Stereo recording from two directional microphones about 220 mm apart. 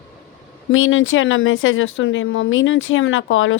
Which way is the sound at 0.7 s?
65° left (ahead or behind).